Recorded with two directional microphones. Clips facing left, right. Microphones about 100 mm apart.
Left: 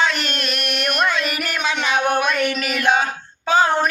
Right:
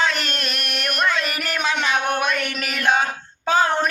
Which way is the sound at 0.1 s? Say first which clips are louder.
Left 2 dB; 40° right (ahead or behind).